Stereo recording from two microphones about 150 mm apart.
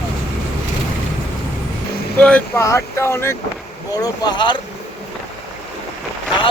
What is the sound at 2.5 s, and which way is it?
Speech, 15° left (ahead or behind).